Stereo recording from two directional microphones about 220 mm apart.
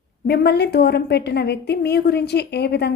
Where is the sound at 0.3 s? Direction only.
50° left (ahead or behind).